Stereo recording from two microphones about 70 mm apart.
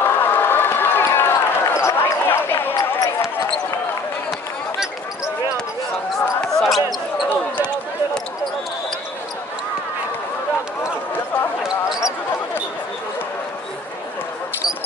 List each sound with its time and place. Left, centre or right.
0.0 s run: left
6.4 s basketball bounce: centre
11.6 s a sound: centre